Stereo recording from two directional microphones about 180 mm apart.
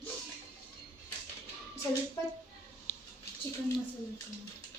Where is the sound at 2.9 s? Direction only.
10° left (ahead or behind).